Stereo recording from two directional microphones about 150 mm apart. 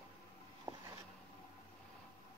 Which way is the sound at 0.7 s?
25° right (ahead or behind).